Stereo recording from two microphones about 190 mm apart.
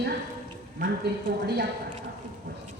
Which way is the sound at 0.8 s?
60° right (ahead or behind).